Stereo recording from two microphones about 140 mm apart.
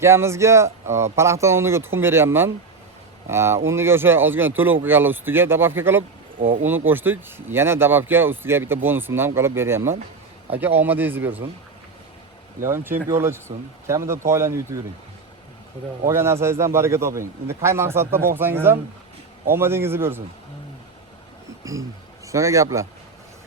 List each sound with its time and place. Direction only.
0.0 s a man's voice: 20° right (ahead or behind)
12.6 s a man's voice: 15° right (ahead or behind)
16.0 s a man's voice: 20° right (ahead or behind)
21.6 s a man's voice: 25° right (ahead or behind)